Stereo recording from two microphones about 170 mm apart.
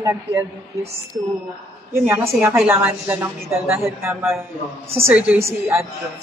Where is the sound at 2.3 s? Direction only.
10° right (ahead or behind).